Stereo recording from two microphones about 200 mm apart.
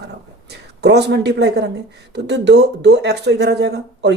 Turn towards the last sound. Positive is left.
turn(degrees=-55)  # may be behind; listen again after turning